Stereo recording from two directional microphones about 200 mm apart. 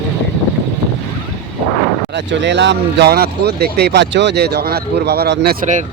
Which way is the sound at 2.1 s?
60° right (ahead or behind).